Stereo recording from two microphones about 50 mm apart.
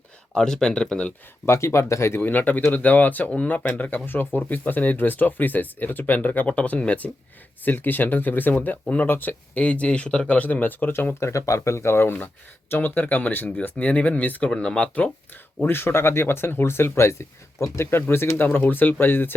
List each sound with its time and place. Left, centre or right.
0.3 s speech: centre
1.5 s speech: left
2.2 s speech: left
7.6 s speech: left
9.8 s speech: left
14.5 s speech: centre
15.6 s speech: left
18.1 s speech: left
18.4 s speech: left